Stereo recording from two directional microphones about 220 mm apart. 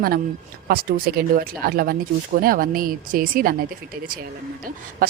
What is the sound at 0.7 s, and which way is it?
Speech, 40° right (ahead or behind).